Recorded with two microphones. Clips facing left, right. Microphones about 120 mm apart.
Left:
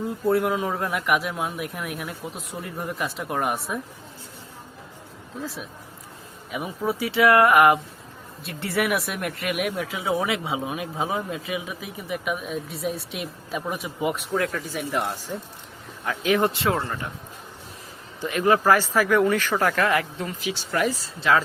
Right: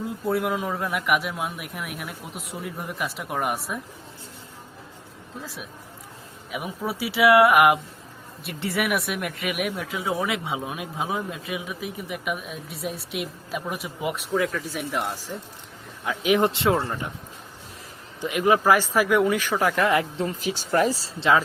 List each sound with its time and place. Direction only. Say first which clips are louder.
0.1 s speech: left 3 dB; centre (ahead or behind)
5.4 s speech: left 4 dB; centre (ahead or behind)
16.0 s speech: right 1 dB; 15° right (ahead or behind)
18.2 s speech: even; 15° right (ahead or behind)
20.4 s speech: right 2 dB; 45° right (ahead or behind)